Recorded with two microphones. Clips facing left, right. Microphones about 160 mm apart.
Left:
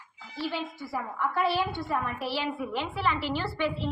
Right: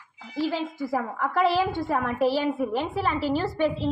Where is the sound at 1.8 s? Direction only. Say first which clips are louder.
Right 6 dB; 45° right (ahead or behind).